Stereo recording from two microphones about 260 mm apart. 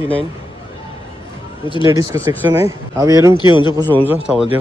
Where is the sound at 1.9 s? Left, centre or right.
Centre.